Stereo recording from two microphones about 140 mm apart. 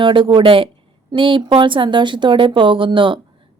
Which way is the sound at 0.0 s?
35° right (ahead or behind).